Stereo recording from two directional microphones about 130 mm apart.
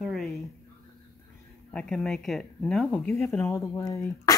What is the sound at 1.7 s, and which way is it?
Speech, 5° left (ahead or behind).